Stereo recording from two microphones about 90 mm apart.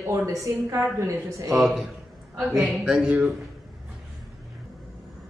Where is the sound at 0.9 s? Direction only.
35° right (ahead or behind).